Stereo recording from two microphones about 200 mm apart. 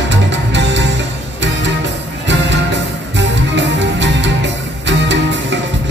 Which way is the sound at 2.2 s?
65° right (ahead or behind).